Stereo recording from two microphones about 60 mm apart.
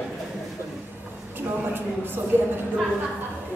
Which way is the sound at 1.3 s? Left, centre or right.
Right.